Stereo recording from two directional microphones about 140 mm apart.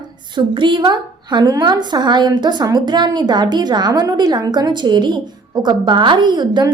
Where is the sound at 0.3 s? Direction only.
35° right (ahead or behind).